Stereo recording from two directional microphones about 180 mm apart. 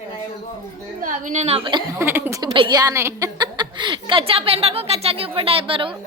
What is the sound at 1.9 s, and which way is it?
Speech, 10° right (ahead or behind).